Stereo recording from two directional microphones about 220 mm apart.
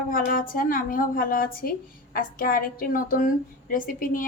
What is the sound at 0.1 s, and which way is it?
A woman's voice, 40° left (ahead or behind).